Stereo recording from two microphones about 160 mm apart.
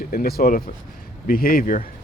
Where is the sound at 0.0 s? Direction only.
65° left (ahead or behind).